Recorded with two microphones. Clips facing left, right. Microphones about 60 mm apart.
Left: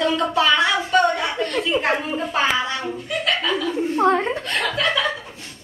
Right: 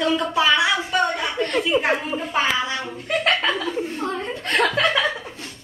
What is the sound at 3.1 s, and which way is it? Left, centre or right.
Speech, right.